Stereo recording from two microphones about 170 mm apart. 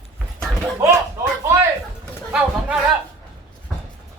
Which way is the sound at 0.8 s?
15° right (ahead or behind).